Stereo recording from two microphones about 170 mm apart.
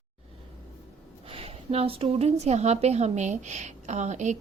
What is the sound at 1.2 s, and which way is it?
A woman's voice, 35° right (ahead or behind).